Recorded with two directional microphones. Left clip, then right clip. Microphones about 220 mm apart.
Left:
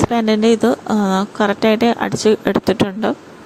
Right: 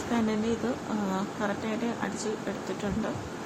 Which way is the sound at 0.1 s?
40° left (ahead or behind).